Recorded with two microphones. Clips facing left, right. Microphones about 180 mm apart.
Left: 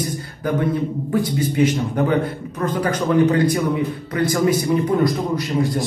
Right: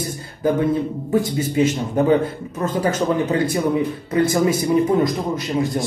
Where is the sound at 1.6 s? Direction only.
25° right (ahead or behind).